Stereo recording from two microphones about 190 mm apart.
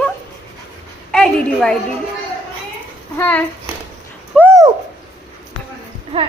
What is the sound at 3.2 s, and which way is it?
Speech, 10° left (ahead or behind).